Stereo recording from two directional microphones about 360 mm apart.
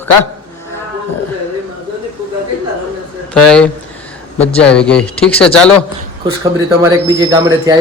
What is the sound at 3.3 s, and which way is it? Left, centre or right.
Speech, centre.